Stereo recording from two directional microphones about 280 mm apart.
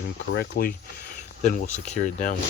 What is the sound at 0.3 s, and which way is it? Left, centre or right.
Speech, left.